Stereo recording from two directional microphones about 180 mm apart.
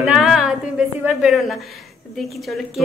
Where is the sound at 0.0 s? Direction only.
5° right (ahead or behind).